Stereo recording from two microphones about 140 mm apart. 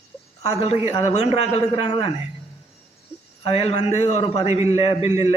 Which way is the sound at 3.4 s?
45° left (ahead or behind).